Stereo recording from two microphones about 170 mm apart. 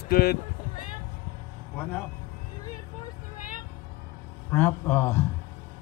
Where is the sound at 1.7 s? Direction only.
10° left (ahead or behind).